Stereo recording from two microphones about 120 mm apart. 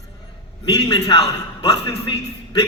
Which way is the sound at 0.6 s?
40° left (ahead or behind).